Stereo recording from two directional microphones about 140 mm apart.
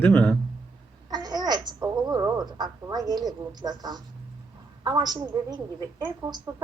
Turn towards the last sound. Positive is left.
turn(degrees=-30)  # may be behind; listen again after turning